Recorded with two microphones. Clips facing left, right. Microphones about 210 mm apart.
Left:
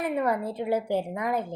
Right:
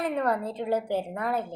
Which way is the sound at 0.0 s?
10° left (ahead or behind).